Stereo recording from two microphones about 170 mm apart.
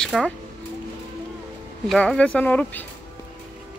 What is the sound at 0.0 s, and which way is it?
Speech, centre (ahead or behind).